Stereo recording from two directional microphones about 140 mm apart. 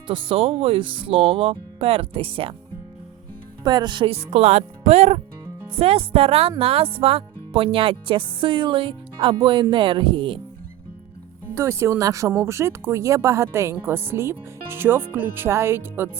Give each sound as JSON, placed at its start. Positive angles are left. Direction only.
{"t": 0.1, "sound": "speech", "side_deg": -40}
{"t": 3.6, "sound": "speech", "side_deg": -30}
{"t": 11.5, "sound": "speech", "side_deg": -20}